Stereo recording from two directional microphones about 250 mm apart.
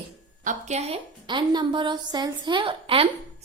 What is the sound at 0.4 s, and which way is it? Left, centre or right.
A woman's voice, right.